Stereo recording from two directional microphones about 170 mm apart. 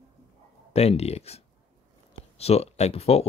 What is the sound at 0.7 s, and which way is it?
Speech, 40° left (ahead or behind).